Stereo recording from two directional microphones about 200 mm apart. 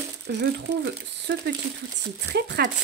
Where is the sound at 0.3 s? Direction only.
55° right (ahead or behind).